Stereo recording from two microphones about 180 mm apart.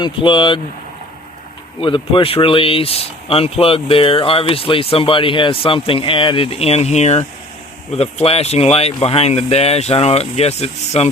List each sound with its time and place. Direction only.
0.0 s speech: 25° left (ahead or behind)
1.8 s speech: 30° left (ahead or behind)